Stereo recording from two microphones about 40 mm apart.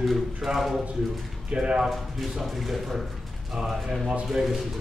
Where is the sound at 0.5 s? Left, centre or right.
Centre.